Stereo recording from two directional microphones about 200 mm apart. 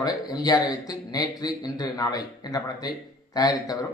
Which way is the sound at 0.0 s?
20° left (ahead or behind).